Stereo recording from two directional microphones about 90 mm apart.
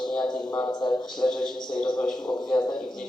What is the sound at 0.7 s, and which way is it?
Speech, 50° left (ahead or behind).